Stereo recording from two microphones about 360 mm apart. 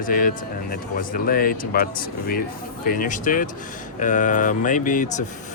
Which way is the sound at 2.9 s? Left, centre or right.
Left.